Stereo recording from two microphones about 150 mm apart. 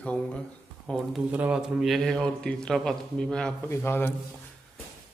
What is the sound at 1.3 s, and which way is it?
A man's voice, 10° right (ahead or behind).